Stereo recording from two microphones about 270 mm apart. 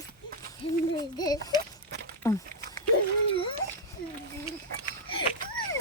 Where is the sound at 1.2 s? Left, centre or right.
Centre.